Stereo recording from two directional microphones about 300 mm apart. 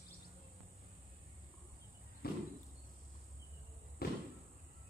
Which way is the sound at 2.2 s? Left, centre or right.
Left.